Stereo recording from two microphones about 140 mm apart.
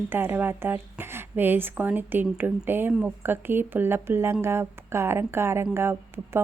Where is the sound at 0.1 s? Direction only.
15° right (ahead or behind).